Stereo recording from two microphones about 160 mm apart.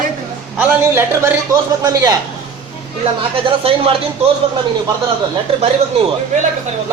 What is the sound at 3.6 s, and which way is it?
Speech, 35° right (ahead or behind).